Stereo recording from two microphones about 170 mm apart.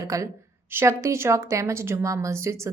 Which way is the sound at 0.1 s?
20° right (ahead or behind).